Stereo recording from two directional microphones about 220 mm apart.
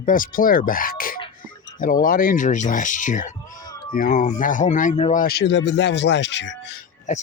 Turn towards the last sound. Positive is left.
turn(degrees=35)  # may be behind; listen again after turning